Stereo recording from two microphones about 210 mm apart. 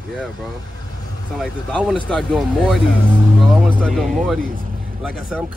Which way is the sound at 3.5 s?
5° right (ahead or behind).